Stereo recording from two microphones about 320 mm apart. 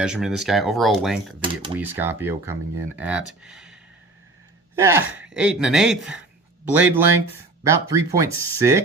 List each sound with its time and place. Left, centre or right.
0.0 s speech: centre